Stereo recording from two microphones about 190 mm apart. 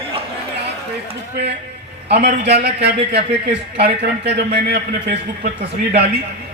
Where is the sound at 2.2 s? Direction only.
55° right (ahead or behind).